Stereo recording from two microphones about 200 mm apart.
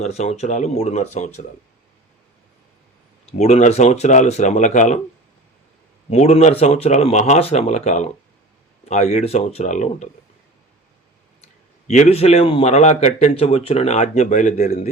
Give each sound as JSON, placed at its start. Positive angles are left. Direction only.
{"t": 0.0, "sound": "a man's voice", "side_deg": 35}
{"t": 3.2, "sound": "a man's voice", "side_deg": 35}
{"t": 6.1, "sound": "a man's voice", "side_deg": 35}
{"t": 11.9, "sound": "a man's voice", "side_deg": 35}